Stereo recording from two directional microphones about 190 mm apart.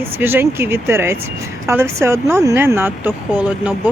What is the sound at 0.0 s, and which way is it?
Speech, 10° right (ahead or behind).